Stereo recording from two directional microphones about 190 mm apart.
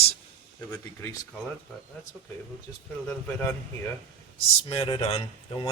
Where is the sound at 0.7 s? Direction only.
15° left (ahead or behind).